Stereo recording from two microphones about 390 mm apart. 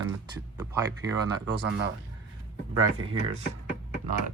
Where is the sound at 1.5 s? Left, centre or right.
Right.